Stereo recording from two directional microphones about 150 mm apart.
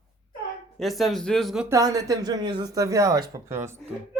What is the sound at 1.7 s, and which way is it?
Speech, 25° right (ahead or behind).